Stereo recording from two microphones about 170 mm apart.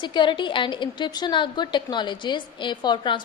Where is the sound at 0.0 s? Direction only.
25° left (ahead or behind).